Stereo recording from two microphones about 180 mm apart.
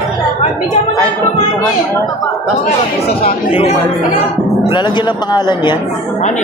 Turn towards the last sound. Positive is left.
turn(degrees=25)  # may be behind; listen again after turning